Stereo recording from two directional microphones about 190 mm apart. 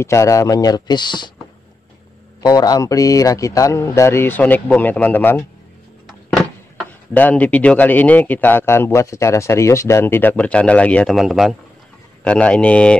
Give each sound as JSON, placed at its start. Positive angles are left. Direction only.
{"t": 0.0, "sound": "speech", "side_deg": 15}
{"t": 2.4, "sound": "speech", "side_deg": 20}